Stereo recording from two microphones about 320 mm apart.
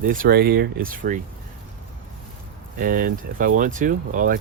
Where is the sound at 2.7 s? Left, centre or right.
Right.